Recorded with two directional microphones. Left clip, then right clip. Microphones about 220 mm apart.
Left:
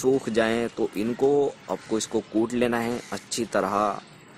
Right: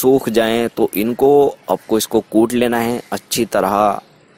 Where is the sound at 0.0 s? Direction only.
35° right (ahead or behind).